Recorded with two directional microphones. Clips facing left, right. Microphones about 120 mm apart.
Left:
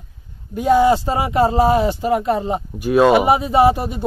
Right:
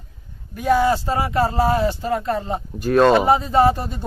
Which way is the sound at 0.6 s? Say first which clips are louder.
Left 4 dB; 20° left (ahead or behind).